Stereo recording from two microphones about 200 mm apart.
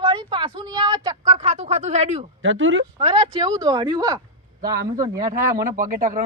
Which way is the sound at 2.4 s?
70° right (ahead or behind).